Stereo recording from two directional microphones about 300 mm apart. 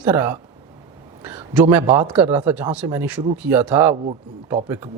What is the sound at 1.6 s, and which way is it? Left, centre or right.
Speech, centre.